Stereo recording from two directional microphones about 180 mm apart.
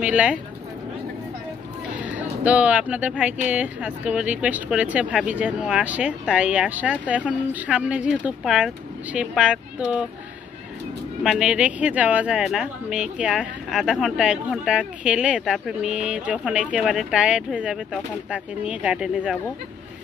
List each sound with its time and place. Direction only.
0.0 s speech: 5° right (ahead or behind)
2.0 s speech: 10° right (ahead or behind)
11.2 s speech: 5° right (ahead or behind)